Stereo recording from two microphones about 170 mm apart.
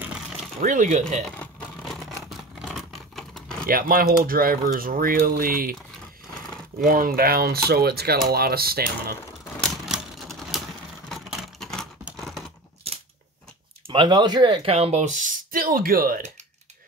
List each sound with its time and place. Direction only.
0.6 s speech: 50° right (ahead or behind)
1.3 s vehicle: 5° left (ahead or behind)
3.6 s speech: 55° right (ahead or behind)
6.8 s speech: 55° right (ahead or behind)
9.6 s typewriter: centre (ahead or behind)
11.1 s vehicle: centre (ahead or behind)
12.9 s scissors: 35° right (ahead or behind)
13.8 s speech: 30° right (ahead or behind); by 16.2 s 60° right (ahead or behind)